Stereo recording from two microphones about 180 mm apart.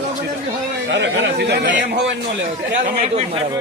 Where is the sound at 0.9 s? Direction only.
75° right (ahead or behind).